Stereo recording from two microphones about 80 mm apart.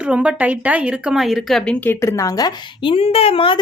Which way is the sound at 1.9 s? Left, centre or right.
Left.